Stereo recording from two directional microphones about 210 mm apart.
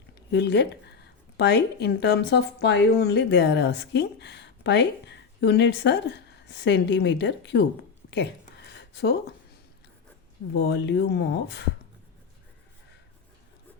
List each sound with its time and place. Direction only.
0.3 s speech: 55° left (ahead or behind)
8.1 s a sound: 50° left (ahead or behind)
10.5 s speech: 55° left (ahead or behind)